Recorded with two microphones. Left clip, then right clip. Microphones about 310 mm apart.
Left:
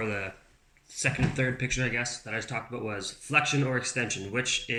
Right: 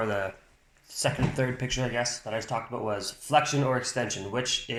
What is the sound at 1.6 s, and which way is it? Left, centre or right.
Speech, centre.